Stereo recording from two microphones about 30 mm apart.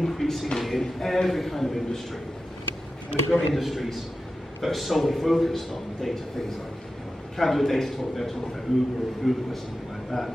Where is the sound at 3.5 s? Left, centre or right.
Centre.